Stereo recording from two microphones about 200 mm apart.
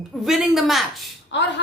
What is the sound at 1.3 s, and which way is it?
Speech, 60° left (ahead or behind).